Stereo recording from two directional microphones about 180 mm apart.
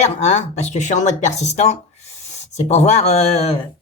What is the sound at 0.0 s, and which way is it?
Speech, 40° left (ahead or behind).